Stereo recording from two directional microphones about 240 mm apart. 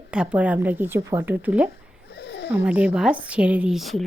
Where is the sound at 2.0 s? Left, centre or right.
Left.